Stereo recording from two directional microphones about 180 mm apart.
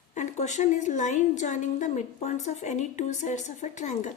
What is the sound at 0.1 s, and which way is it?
A woman's voice, 40° left (ahead or behind).